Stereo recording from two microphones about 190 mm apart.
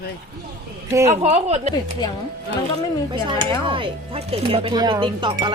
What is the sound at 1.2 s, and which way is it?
Speech, 35° right (ahead or behind).